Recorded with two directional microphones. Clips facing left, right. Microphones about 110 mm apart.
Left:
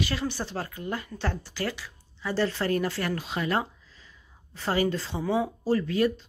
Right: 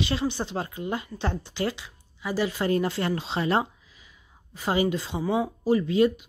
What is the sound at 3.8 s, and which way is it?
Speech, 15° right (ahead or behind).